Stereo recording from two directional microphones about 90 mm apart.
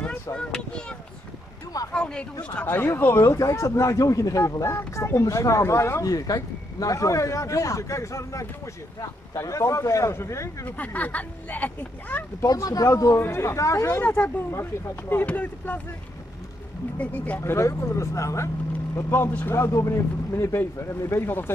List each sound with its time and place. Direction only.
0.0 s speech: 15° left (ahead or behind)
2.5 s speech: 20° left (ahead or behind)
10.8 s speech: 20° left (ahead or behind)
12.4 s speech: 40° left (ahead or behind)
14.0 s speech: 20° left (ahead or behind)
17.0 s speech: 20° left (ahead or behind)
17.4 s speech: 30° left (ahead or behind)